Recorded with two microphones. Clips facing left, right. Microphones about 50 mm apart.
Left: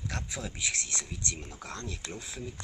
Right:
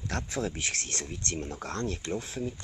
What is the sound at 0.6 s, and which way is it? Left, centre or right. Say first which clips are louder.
Speech: right 1 dB; right.